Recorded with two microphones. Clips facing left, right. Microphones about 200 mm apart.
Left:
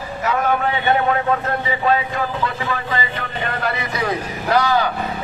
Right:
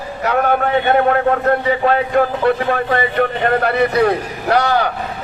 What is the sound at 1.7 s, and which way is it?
A man's voice, 55° right (ahead or behind).